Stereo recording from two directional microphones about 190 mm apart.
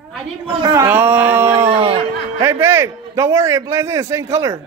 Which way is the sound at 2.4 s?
15° right (ahead or behind).